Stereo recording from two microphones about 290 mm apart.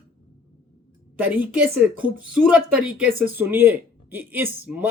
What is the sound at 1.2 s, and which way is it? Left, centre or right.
Speech, centre.